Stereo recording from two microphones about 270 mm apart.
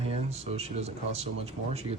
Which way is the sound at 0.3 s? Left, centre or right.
Right.